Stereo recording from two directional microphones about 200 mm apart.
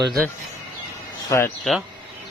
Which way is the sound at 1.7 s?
5° left (ahead or behind).